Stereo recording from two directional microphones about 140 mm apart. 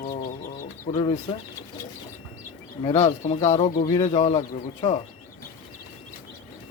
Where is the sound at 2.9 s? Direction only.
45° left (ahead or behind).